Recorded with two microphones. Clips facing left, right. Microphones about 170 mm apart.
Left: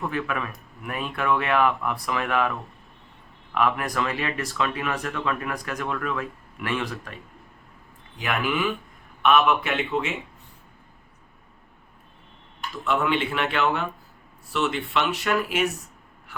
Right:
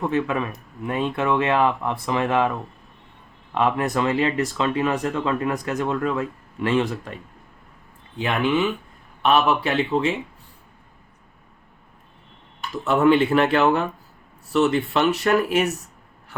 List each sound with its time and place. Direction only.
0.0 s speech: 25° right (ahead or behind)
3.5 s speech: 25° right (ahead or behind)
8.2 s speech: 30° right (ahead or behind)
12.8 s speech: 40° right (ahead or behind)